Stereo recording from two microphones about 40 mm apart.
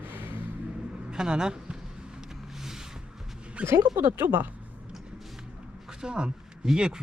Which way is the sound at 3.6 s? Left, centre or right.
Right.